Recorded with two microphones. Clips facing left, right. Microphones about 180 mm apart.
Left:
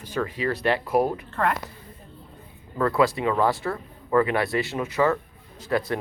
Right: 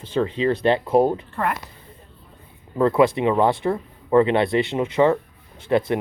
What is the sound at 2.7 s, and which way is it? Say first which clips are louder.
Speech: right 5 dB; 20° right (ahead or behind).